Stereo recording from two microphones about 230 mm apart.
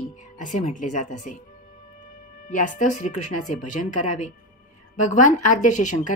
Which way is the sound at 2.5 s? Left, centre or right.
Left.